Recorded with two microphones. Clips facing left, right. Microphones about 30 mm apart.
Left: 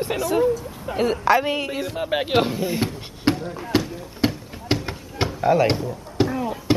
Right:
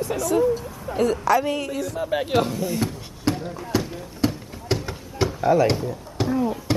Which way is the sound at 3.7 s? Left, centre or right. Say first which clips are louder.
Left 3 dB; left.